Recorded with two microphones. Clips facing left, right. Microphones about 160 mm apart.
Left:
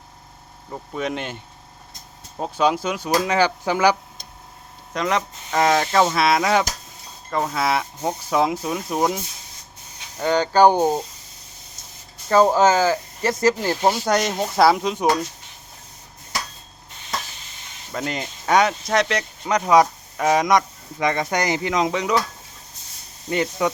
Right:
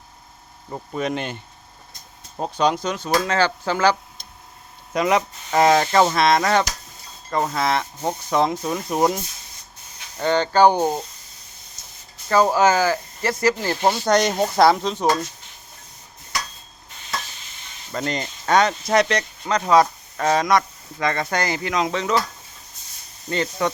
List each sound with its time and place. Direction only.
0.9 s speech: centre (ahead or behind)
2.4 s speech: 5° left (ahead or behind)
4.9 s speech: 10° right (ahead or behind)
10.2 s speech: 10° left (ahead or behind)
11.8 s a sound: 50° left (ahead or behind)
12.3 s speech: 20° left (ahead or behind)
17.9 s speech: 5° left (ahead or behind)
19.7 s speech: 10° left (ahead or behind)
23.3 s speech: 10° left (ahead or behind)